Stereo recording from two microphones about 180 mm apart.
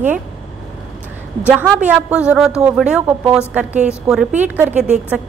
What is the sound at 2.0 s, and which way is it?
A woman's voice, 5° right (ahead or behind).